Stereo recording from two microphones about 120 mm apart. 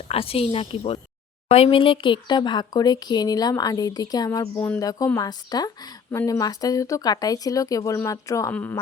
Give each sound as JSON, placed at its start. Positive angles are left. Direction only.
{"t": 0.1, "sound": "a woman's voice", "side_deg": 55}
{"t": 6.1, "sound": "speech", "side_deg": 20}